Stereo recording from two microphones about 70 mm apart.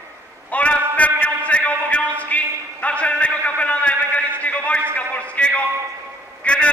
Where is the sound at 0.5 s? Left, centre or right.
Centre.